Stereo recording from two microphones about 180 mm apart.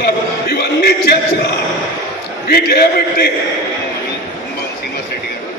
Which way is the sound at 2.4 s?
60° left (ahead or behind).